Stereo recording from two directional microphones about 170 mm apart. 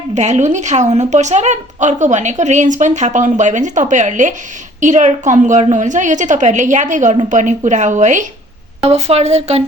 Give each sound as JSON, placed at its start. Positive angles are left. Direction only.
{"t": 0.1, "sound": "a woman's voice", "side_deg": -45}